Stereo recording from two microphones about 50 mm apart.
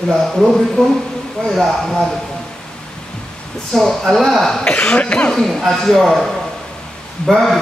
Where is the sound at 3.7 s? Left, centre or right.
Centre.